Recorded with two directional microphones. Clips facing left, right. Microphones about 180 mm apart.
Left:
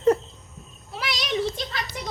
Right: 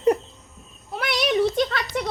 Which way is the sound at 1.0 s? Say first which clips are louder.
Right 6 dB; 55° right (ahead or behind).